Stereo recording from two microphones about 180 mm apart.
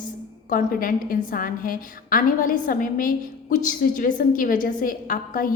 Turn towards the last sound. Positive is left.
turn(degrees=50)  # may be behind; listen again after turning